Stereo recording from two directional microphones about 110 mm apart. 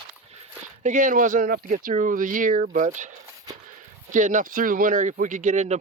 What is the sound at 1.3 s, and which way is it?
Speech, 90° right.